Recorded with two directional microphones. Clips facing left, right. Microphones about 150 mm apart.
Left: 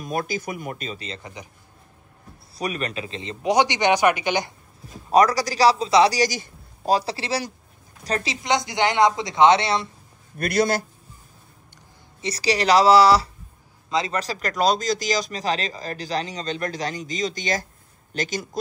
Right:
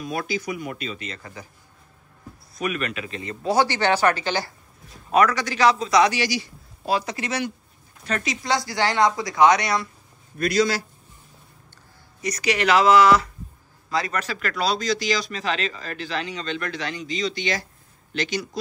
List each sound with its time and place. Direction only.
0.0 s speech: 45° left (ahead or behind)
1.2 s speech: 20° left (ahead or behind)
2.5 s speech: 35° left (ahead or behind); by 4.6 s 15° left (ahead or behind)
5.1 s speech: 35° left (ahead or behind)
10.3 s speech: 55° left (ahead or behind)
12.2 s speech: 30° left (ahead or behind)
13.8 s a man's voice: 20° left (ahead or behind)
14.2 s speech: 40° left (ahead or behind)